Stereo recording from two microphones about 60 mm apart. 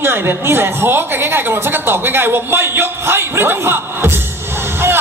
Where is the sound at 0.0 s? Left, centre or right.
Right.